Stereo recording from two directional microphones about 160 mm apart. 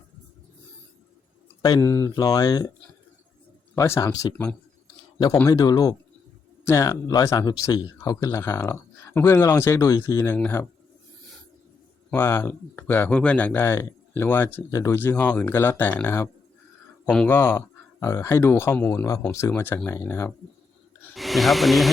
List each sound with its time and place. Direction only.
1.6 s speech: 20° left (ahead or behind)
3.8 s speech: 20° left (ahead or behind)
5.5 s speech: 20° left (ahead or behind)
12.1 s speech: 15° left (ahead or behind)
21.2 s speech: centre (ahead or behind)